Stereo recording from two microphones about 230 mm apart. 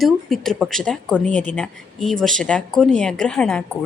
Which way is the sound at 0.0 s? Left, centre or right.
Centre.